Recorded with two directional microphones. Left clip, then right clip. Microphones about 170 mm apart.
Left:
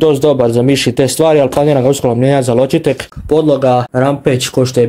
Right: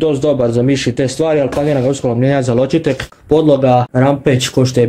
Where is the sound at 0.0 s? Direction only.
45° left (ahead or behind).